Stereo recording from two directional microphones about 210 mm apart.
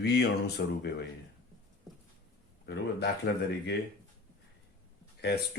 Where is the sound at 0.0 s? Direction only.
50° left (ahead or behind).